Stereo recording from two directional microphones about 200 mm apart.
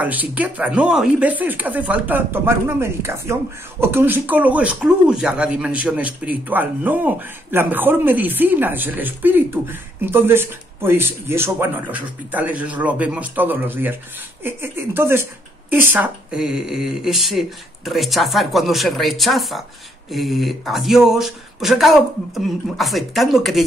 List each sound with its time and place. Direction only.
0.0 s speech: 10° right (ahead or behind)